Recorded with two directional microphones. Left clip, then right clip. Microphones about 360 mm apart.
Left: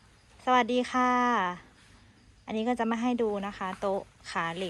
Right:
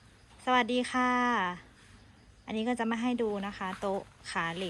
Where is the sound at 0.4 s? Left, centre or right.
Centre.